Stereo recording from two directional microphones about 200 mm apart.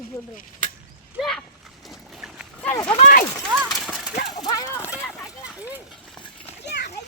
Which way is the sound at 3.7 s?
Centre (ahead or behind).